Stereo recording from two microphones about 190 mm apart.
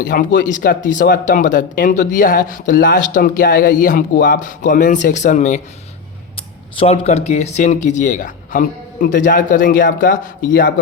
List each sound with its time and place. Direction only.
0.0 s speech: 45° left (ahead or behind)